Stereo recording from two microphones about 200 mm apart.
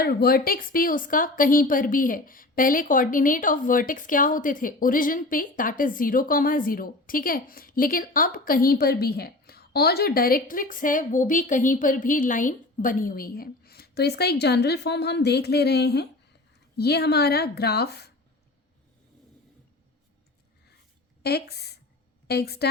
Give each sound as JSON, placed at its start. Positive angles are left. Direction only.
{"t": 0.0, "sound": "a woman's voice", "side_deg": 50}
{"t": 21.2, "sound": "a woman's voice", "side_deg": 55}